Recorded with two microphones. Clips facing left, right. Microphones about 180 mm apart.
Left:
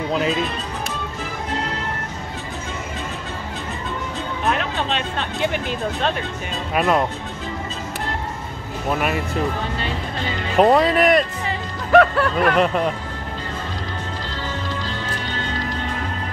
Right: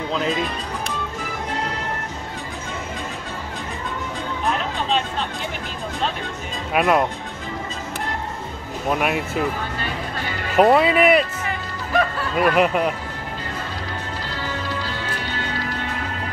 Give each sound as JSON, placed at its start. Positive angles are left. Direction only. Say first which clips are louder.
{"t": 0.1, "sound": "speech", "louder": "left 2 dB", "side_deg": 5}
{"t": 4.5, "sound": "a sound", "louder": "left 1 dB", "side_deg": 70}
{"t": 6.7, "sound": "speech", "louder": "right 1 dB", "side_deg": -5}
{"t": 8.9, "sound": "speech", "louder": "even", "side_deg": 0}
{"t": 10.5, "sound": "speech", "louder": "even", "side_deg": -5}
{"t": 11.9, "sound": "speech", "louder": "left 8 dB", "side_deg": 70}
{"t": 12.4, "sound": "speech", "louder": "right 2 dB", "side_deg": -5}